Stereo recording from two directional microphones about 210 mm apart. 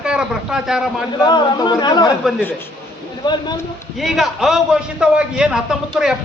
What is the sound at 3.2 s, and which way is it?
Speech, 20° left (ahead or behind).